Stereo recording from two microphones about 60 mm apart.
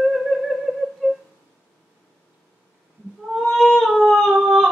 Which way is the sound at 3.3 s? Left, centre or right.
Centre.